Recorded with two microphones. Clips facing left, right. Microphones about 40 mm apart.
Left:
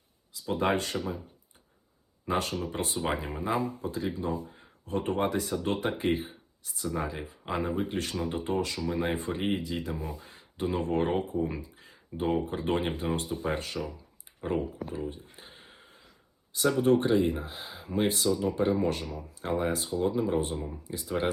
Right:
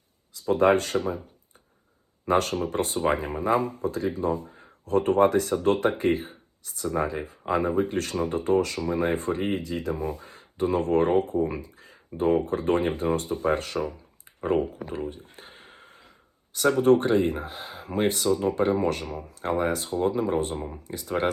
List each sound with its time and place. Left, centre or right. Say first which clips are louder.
0.4 s speech: right 7 dB; right
2.2 s speech: right 6 dB; right
11.5 s a sound: right 4 dB; right
12.5 s speech: right 5 dB; right
14.4 s speech: right 6 dB; right
15.2 s a sound: right 3 dB; right
16.6 s speech: right 4 dB; right